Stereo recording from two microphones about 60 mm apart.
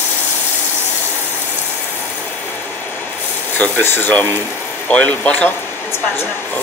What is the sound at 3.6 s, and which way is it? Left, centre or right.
Speech, left.